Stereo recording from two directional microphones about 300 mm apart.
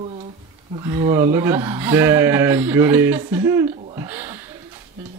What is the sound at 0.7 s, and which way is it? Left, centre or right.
Speech, centre.